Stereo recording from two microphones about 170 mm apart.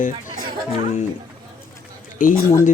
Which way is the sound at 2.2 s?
50° left (ahead or behind).